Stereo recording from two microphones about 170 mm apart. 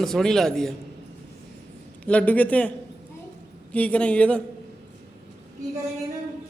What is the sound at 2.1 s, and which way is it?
A woman's voice, 10° left (ahead or behind).